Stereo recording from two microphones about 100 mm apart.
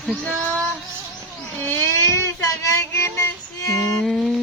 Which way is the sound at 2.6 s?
30° left (ahead or behind).